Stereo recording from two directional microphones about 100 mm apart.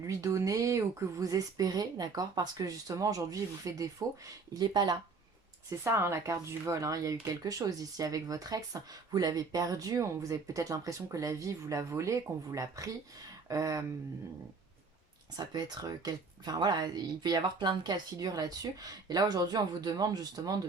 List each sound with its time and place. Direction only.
0.1 s speech: 30° right (ahead or behind)
4.5 s speech: 45° right (ahead or behind)
5.8 s speech: 25° right (ahead or behind)
15.4 s speech: 45° right (ahead or behind)